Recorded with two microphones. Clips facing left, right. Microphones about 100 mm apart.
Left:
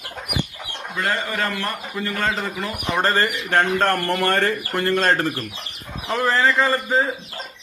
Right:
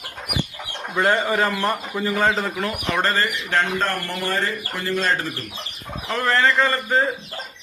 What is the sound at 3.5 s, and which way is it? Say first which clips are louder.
Speech: left 5 dB; 55° left (ahead or behind).